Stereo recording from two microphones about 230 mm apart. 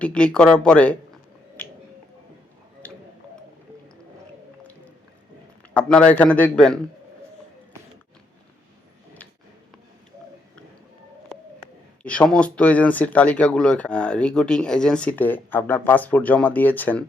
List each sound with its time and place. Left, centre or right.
0.0 s speech: centre
2.8 s a sound: centre
5.7 s speech: centre
12.0 s speech: centre